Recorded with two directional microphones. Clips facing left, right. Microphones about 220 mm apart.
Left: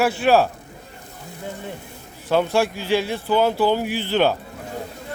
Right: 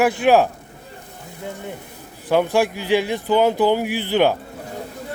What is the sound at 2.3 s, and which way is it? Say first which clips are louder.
Speech: right 2 dB; 15° right (ahead or behind).